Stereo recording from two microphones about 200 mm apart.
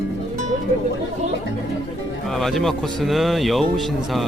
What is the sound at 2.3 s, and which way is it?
Speech, centre (ahead or behind).